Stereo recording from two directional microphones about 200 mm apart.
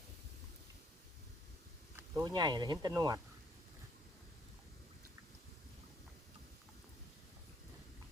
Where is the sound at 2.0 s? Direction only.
10° right (ahead or behind).